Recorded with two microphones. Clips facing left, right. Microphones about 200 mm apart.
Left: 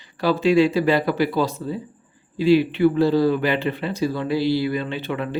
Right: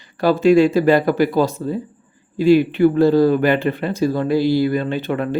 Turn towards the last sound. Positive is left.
turn(degrees=-45)  # may be behind; listen again after turning